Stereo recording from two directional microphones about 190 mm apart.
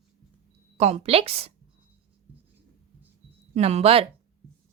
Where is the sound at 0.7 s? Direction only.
35° right (ahead or behind).